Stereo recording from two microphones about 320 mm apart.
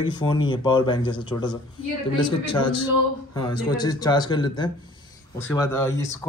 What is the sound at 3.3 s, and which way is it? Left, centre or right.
Speech, centre.